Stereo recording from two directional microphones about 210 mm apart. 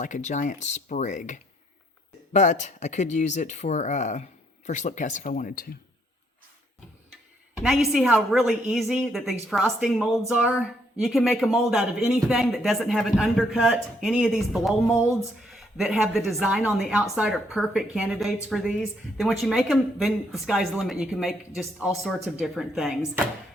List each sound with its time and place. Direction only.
0.0 s speech: 35° left (ahead or behind)
7.9 s speech: centre (ahead or behind)